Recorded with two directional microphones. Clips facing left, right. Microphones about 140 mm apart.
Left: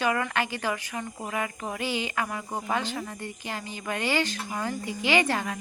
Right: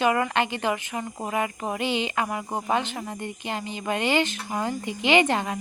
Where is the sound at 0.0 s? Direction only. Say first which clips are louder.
Right 4 dB; 20° right (ahead or behind).